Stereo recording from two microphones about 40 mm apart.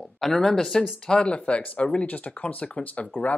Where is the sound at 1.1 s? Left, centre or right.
Left.